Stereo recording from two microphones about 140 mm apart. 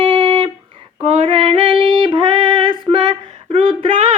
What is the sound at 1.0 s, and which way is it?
Female singing, 35° right (ahead or behind).